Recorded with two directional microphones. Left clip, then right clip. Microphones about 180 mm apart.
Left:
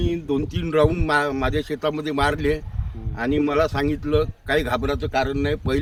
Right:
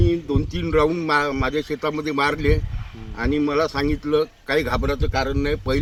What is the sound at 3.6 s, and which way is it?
Speech, 35° left (ahead or behind).